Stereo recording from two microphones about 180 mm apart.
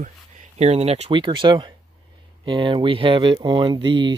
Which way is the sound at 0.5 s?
35° right (ahead or behind).